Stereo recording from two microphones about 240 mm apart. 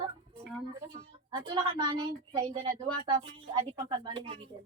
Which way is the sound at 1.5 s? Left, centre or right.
Centre.